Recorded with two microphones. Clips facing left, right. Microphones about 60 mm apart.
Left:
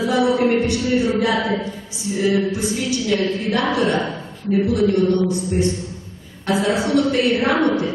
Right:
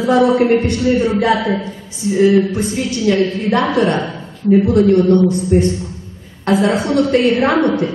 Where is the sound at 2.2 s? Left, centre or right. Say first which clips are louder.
Right 6 dB; right.